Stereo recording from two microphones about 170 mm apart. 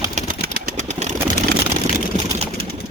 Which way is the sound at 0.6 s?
45° right (ahead or behind).